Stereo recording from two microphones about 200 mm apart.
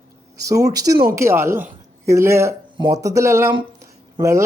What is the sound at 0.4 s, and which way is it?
Speech, 15° right (ahead or behind).